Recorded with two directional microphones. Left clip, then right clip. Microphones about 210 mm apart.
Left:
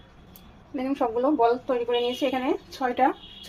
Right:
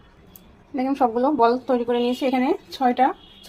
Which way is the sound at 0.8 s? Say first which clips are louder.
Right 5 dB; 35° right (ahead or behind).